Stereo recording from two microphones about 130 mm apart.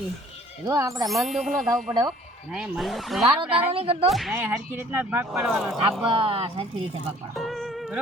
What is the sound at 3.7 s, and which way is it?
Speech, 50° right (ahead or behind).